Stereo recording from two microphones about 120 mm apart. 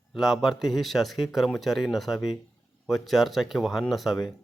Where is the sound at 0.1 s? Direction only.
Centre (ahead or behind).